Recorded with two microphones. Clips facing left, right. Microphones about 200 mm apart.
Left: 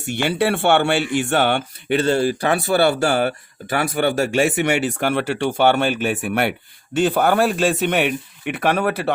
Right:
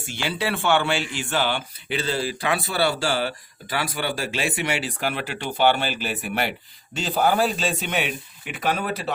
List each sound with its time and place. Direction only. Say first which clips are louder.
0.1 s a man's voice: left 7 dB; 60° left (ahead or behind)